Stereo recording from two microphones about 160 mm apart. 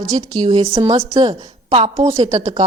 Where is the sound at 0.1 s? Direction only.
25° right (ahead or behind).